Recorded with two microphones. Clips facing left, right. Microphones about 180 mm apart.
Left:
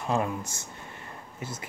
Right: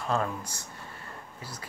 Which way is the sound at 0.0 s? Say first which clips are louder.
Left 2 dB; 15° left (ahead or behind).